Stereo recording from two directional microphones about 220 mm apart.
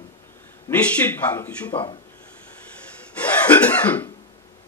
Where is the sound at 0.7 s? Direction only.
10° left (ahead or behind).